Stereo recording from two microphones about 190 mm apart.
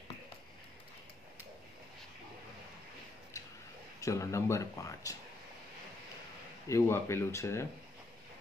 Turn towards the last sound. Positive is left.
turn(degrees=15)  # may be behind; listen again after turning